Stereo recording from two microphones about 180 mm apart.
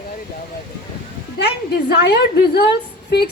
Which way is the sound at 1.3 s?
65° left (ahead or behind).